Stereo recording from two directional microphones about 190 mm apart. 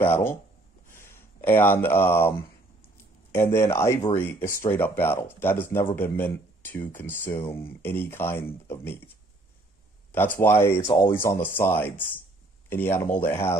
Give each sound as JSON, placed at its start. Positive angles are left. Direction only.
{"t": 0.0, "sound": "speech", "side_deg": 10}
{"t": 10.4, "sound": "speech", "side_deg": 10}
{"t": 10.9, "sound": "speech", "side_deg": 25}
{"t": 11.2, "sound": "speech", "side_deg": 10}